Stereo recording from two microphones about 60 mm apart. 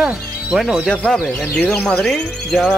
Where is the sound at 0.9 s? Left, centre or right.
Centre.